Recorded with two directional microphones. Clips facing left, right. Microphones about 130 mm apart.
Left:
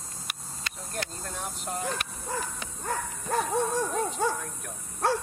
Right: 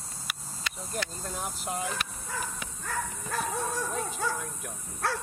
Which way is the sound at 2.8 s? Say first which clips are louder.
Left 2 dB; 30° left (ahead or behind).